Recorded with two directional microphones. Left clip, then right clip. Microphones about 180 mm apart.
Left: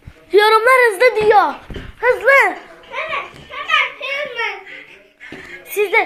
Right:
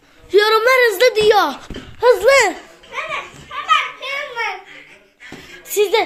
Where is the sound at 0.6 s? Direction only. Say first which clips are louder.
Left 1 dB; 15° right (ahead or behind).